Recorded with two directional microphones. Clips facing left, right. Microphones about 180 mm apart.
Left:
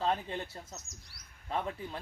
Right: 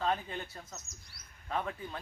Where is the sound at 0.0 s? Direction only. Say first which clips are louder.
Left 1 dB; 30° left (ahead or behind).